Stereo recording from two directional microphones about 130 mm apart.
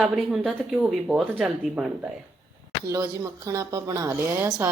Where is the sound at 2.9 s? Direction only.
25° right (ahead or behind).